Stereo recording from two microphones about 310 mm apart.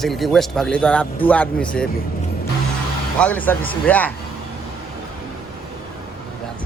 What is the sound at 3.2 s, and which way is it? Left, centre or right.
Speech, centre.